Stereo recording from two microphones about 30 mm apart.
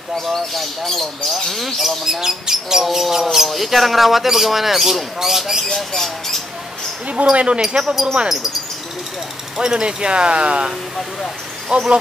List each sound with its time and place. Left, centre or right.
0.3 s speech: centre
2.0 s speech: centre
5.9 s speech: centre
7.3 s speech: right
7.8 s speech: centre
9.6 s speech: right
11.7 s speech: right